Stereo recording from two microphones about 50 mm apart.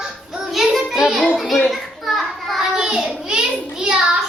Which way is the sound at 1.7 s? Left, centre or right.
Centre.